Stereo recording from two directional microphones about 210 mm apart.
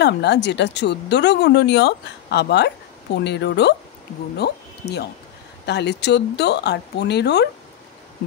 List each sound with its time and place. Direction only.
0.0 s speech: 55° left (ahead or behind)